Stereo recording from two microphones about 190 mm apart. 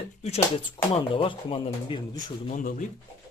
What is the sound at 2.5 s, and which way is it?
Speech, 45° left (ahead or behind).